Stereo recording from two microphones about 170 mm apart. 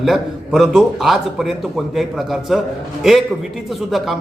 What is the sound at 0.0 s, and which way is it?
A man's voice, centre (ahead or behind).